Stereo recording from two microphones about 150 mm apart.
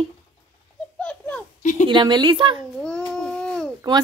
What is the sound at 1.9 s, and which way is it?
Speech, 30° right (ahead or behind).